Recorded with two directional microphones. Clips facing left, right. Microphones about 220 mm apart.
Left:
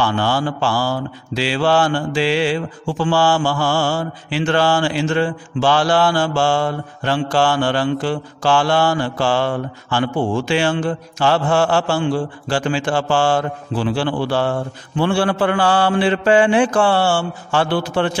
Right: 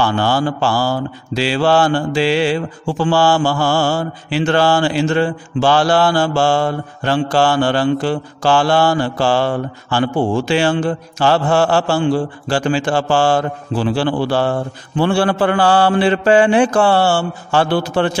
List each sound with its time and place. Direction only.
0.0 s mantra: 40° right (ahead or behind)